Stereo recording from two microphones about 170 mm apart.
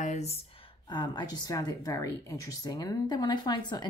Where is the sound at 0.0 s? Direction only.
40° left (ahead or behind).